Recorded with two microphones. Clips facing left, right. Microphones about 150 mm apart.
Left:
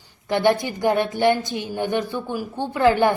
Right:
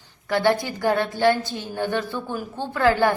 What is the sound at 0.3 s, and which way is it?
A woman's voice, 20° left (ahead or behind).